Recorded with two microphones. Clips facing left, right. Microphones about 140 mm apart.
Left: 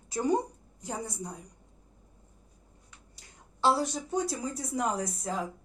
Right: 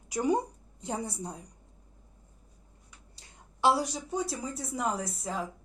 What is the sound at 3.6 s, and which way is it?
Speech, 10° right (ahead or behind).